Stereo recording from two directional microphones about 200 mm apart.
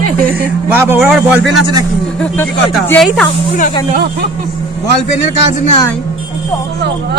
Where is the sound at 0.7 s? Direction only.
10° right (ahead or behind).